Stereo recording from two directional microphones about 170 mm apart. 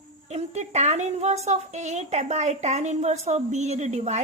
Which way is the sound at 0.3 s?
40° right (ahead or behind).